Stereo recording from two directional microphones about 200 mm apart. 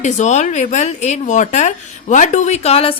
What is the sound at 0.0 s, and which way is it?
Speech, 35° left (ahead or behind).